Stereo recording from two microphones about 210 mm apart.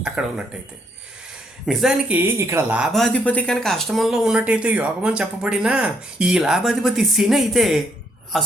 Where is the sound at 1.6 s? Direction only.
Centre (ahead or behind).